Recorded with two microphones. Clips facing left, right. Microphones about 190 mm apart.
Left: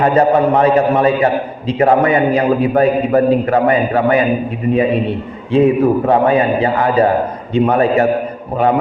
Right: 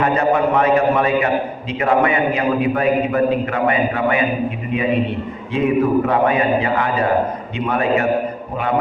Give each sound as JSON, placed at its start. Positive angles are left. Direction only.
{"t": 0.0, "sound": "a man's voice", "side_deg": 35}
{"t": 5.5, "sound": "a man's voice", "side_deg": 30}